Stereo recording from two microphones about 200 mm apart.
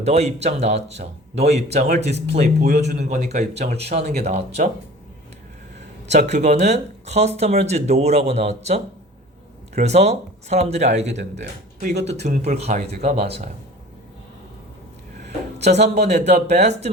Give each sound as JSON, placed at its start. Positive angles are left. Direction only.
{"t": 0.0, "sound": "speech", "side_deg": -35}
{"t": 3.1, "sound": "speech", "side_deg": -35}
{"t": 6.1, "sound": "speech", "side_deg": -35}
{"t": 15.5, "sound": "speech", "side_deg": -35}